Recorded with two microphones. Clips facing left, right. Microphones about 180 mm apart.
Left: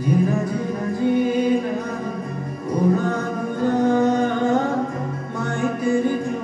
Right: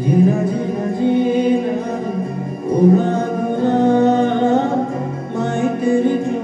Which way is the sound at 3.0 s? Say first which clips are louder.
Right 5 dB; 25° right (ahead or behind).